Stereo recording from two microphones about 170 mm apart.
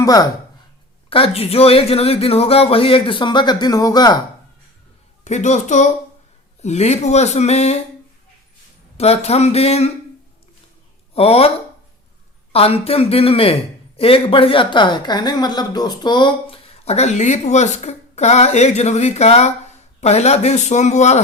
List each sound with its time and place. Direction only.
0.0 s speech: 20° left (ahead or behind)
1.1 s speech: 35° left (ahead or behind)
5.2 s a woman's voice: 45° left (ahead or behind)
9.0 s speech: 35° left (ahead or behind)
11.1 s speech: 35° left (ahead or behind)
12.5 s speech: 35° left (ahead or behind)